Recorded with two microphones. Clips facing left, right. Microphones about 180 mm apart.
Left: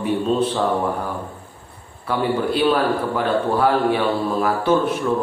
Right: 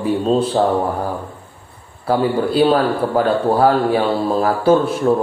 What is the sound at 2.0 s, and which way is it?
A man's voice, 35° right (ahead or behind).